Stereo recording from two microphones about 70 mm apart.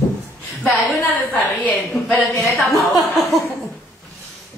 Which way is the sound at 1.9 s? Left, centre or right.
Centre.